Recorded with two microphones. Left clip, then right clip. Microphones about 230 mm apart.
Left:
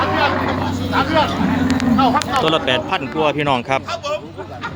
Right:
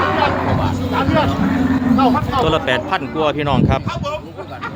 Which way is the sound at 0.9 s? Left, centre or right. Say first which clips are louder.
Left 1 dB; right.